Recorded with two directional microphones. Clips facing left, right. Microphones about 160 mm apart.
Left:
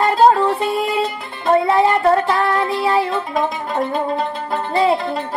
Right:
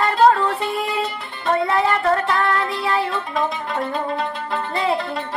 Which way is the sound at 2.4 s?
20° left (ahead or behind).